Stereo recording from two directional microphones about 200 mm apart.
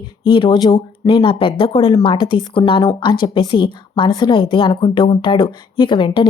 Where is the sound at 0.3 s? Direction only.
25° left (ahead or behind).